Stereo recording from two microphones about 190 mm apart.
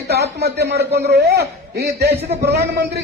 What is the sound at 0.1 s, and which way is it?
A man's voice, 60° right (ahead or behind).